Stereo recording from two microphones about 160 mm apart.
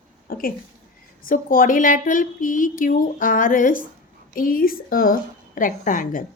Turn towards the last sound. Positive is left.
turn(degrees=60)  # may be behind; listen again after turning